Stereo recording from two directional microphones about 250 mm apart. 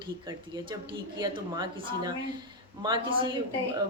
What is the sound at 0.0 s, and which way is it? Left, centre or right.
Speech, centre.